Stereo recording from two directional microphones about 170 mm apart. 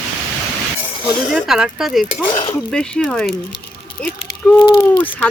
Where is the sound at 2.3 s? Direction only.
25° left (ahead or behind).